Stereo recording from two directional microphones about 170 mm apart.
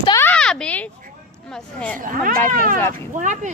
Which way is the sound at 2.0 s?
55° right (ahead or behind).